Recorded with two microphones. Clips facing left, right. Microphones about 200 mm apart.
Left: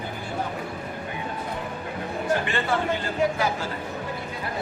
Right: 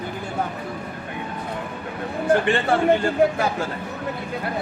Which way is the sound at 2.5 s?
55° right (ahead or behind).